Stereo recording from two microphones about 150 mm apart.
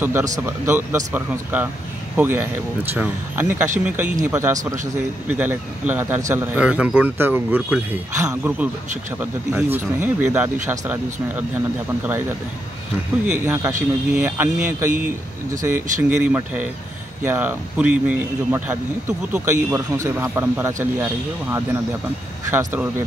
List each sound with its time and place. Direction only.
0.0 s speech: 15° right (ahead or behind)
13.3 s speech: 15° right (ahead or behind)